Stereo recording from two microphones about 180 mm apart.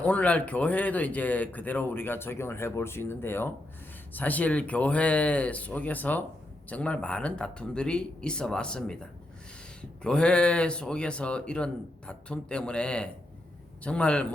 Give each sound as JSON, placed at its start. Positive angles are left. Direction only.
{"t": 0.0, "sound": "speech", "side_deg": 10}